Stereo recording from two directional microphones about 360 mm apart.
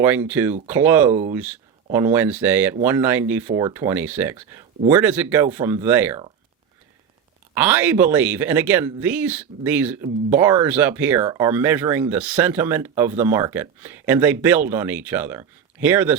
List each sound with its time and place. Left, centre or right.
0.0 s speech: centre
7.5 s speech: centre